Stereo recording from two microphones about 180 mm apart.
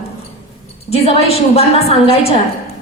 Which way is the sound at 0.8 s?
35° left (ahead or behind).